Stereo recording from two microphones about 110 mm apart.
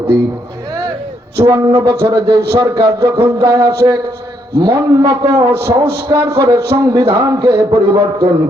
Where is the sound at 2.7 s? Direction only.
25° right (ahead or behind).